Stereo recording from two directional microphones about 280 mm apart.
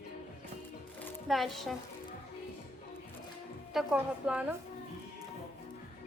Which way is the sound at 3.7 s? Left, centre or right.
Centre.